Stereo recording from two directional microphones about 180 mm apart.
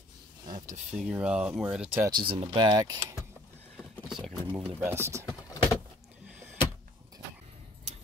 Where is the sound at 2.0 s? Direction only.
25° right (ahead or behind).